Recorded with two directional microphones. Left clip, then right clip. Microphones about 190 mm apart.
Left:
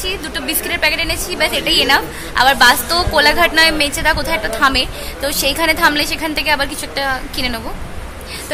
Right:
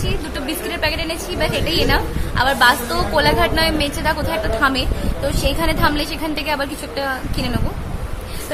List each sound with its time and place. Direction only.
0.0 s a woman's voice: centre (ahead or behind)